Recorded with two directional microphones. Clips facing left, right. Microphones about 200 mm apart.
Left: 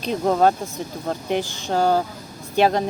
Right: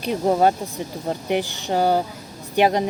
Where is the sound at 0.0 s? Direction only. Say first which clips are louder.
Even; 10° right (ahead or behind).